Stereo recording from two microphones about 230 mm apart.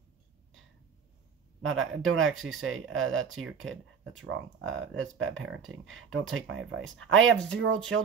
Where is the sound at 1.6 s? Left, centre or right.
Right.